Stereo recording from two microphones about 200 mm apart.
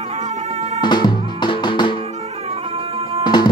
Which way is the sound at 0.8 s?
20° left (ahead or behind).